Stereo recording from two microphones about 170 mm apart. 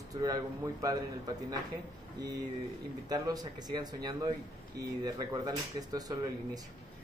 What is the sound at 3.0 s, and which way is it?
Speech, 20° right (ahead or behind).